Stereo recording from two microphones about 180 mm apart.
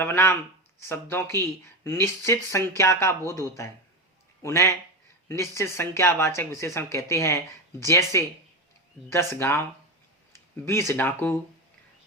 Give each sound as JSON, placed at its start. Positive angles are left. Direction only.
{"t": 0.0, "sound": "speech", "side_deg": 10}
{"t": 4.4, "sound": "speech", "side_deg": 15}
{"t": 10.7, "sound": "speech", "side_deg": 15}